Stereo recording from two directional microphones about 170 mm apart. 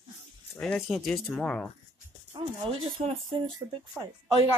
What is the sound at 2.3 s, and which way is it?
Speech, 30° right (ahead or behind).